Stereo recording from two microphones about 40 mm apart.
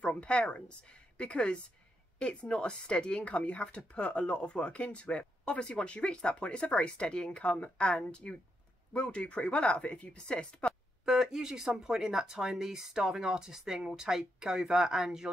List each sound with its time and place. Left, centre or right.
0.0 s a woman's voice: left
11.1 s speech: centre